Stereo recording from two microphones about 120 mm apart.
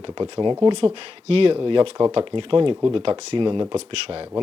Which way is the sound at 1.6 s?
40° right (ahead or behind).